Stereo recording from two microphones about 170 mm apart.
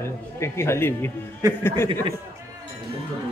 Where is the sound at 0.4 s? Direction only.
15° left (ahead or behind).